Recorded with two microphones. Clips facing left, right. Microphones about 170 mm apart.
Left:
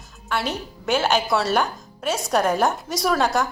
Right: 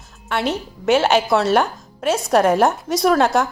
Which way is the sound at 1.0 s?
75° right (ahead or behind).